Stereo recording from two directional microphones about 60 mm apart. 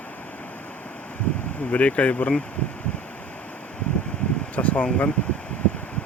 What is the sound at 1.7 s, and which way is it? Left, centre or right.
Speech, left.